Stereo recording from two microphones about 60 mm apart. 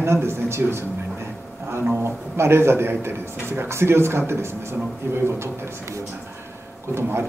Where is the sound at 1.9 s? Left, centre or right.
Right.